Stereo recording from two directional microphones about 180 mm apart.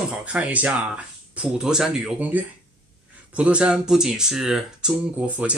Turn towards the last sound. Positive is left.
turn(degrees=-5)  # may be behind; listen again after turning